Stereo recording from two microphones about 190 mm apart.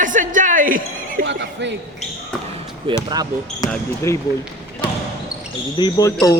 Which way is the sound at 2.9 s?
25° right (ahead or behind).